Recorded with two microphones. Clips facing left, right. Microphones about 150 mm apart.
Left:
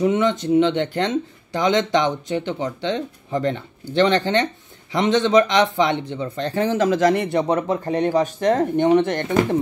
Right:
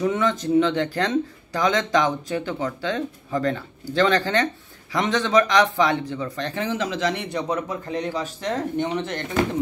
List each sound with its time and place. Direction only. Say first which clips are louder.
0.0 s speech: left 3 dB; 20° left (ahead or behind); by 9.2 s 50° left (ahead or behind)